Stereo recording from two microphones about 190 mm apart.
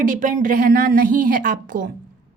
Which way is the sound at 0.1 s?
45° right (ahead or behind).